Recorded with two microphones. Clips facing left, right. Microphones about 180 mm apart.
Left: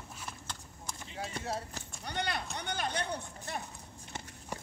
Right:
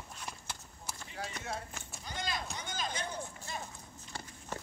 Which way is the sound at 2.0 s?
65° left (ahead or behind).